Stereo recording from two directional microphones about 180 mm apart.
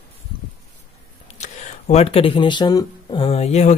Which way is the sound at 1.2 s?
40° left (ahead or behind).